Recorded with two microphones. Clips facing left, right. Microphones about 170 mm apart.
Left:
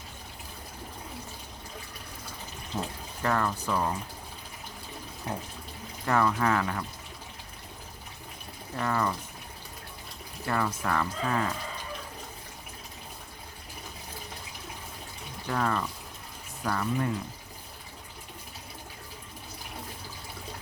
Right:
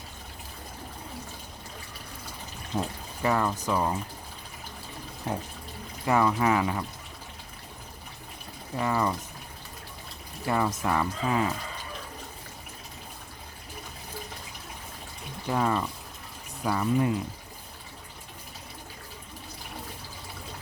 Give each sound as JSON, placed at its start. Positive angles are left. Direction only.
{"t": 2.7, "sound": "speech", "side_deg": -15}
{"t": 6.1, "sound": "speech", "side_deg": -15}
{"t": 8.7, "sound": "speech", "side_deg": -10}
{"t": 10.4, "sound": "speech", "side_deg": -15}
{"t": 15.4, "sound": "speech", "side_deg": -15}